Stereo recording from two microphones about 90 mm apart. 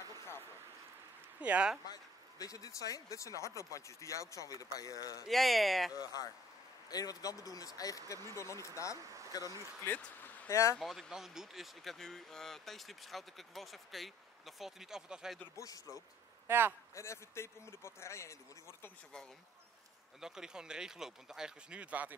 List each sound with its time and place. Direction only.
1.4 s speech: 15° right (ahead or behind)
1.9 s speech: 40° left (ahead or behind)
5.3 s speech: centre (ahead or behind)
5.9 s speech: 45° left (ahead or behind)
9.8 s a sound: 20° left (ahead or behind)
10.5 s speech: 35° left (ahead or behind)
10.8 s speech: centre (ahead or behind)
15.5 s speech: 40° left (ahead or behind)
16.4 s speech: 25° right (ahead or behind)
16.9 s speech: 30° left (ahead or behind)
20.2 s speech: 5° right (ahead or behind)